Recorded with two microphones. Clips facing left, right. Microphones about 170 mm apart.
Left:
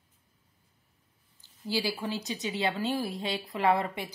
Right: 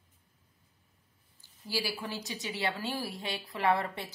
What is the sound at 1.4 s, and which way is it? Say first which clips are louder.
Speech: left 4 dB; 20° left (ahead or behind).